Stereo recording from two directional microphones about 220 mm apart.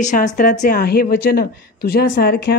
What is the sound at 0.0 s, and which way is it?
Speech, 35° left (ahead or behind).